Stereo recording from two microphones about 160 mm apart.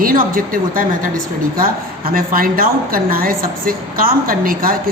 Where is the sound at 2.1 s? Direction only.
60° right (ahead or behind).